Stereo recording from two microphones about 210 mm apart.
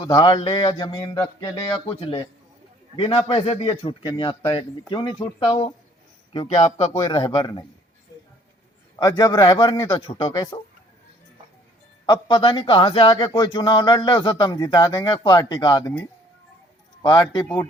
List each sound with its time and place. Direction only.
0.0 s a man's voice: 20° left (ahead or behind)
9.0 s a man's voice: 20° left (ahead or behind)
12.0 s a man's voice: 20° left (ahead or behind)